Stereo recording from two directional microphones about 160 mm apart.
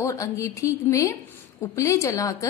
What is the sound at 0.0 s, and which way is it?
A woman's voice, 20° left (ahead or behind).